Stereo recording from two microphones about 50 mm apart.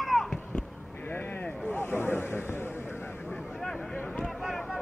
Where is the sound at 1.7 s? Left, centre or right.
Left.